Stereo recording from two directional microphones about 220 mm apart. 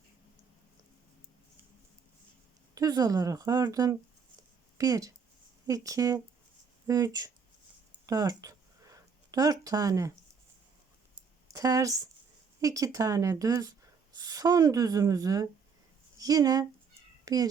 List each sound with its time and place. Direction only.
2.7 s a woman's voice: 15° right (ahead or behind)
8.0 s a sound: 15° right (ahead or behind)
11.5 s a woman's voice: 15° right (ahead or behind)